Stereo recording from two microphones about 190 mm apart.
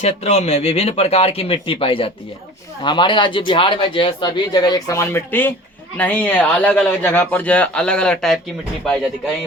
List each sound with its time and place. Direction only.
0.0 s speech: 35° left (ahead or behind); by 8.4 s 5° left (ahead or behind)